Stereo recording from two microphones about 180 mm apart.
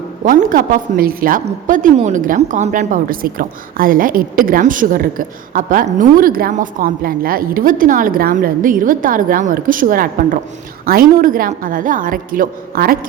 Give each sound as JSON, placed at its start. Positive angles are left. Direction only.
{"t": 0.3, "sound": "a woman's voice", "side_deg": -50}